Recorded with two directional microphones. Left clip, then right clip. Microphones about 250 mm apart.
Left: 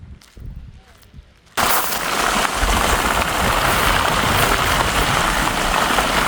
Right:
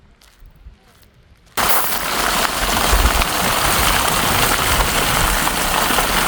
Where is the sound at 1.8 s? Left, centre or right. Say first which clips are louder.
Even; centre.